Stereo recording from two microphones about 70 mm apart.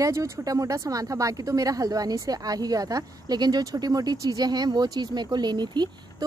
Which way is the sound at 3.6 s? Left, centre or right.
Right.